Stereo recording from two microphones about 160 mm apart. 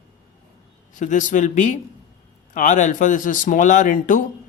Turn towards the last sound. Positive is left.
turn(degrees=55)  # may be behind; listen again after turning